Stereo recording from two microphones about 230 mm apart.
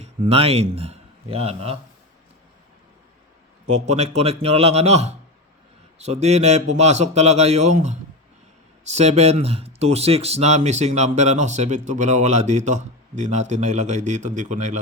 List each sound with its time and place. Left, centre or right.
0.0 s speech: right
3.7 s a man's voice: right